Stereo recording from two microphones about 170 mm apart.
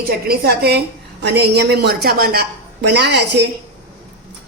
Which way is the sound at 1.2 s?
80° right.